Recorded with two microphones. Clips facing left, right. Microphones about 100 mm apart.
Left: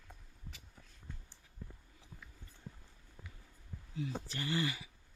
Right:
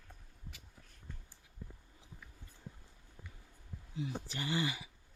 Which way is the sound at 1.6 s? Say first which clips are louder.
Even; 5° right (ahead or behind).